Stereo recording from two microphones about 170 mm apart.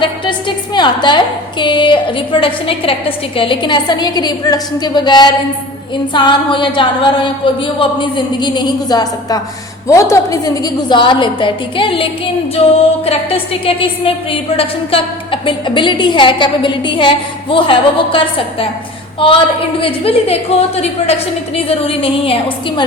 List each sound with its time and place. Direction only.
0.0 s a woman's voice: 30° left (ahead or behind)
13.1 s a woman's voice: 35° left (ahead or behind)